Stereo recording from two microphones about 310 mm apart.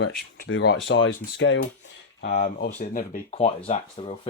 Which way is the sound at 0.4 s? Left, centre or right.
Left.